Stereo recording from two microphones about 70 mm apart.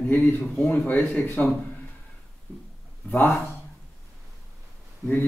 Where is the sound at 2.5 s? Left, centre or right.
Left.